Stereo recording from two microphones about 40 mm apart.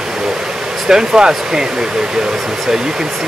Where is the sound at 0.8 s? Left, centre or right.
Centre.